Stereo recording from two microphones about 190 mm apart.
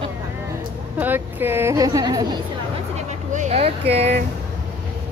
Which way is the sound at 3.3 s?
35° right (ahead or behind).